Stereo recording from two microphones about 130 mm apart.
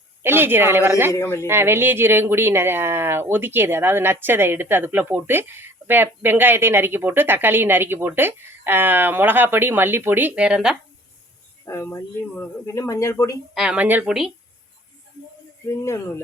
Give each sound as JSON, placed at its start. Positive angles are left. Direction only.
{"t": 0.2, "sound": "speech", "side_deg": -15}
{"t": 1.1, "sound": "speech", "side_deg": 20}
{"t": 1.5, "sound": "speech", "side_deg": -20}
{"t": 11.6, "sound": "speech", "side_deg": 20}
{"t": 13.5, "sound": "speech", "side_deg": -5}
{"t": 15.7, "sound": "speech", "side_deg": 25}